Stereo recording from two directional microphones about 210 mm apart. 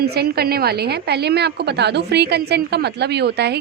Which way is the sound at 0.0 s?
50° right (ahead or behind).